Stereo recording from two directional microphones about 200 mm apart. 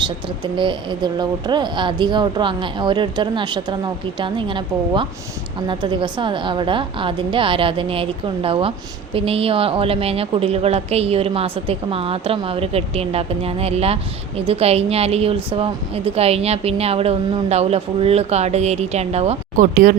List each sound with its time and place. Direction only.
0.0 s a woman's voice: 25° right (ahead or behind); by 20.0 s 45° right (ahead or behind)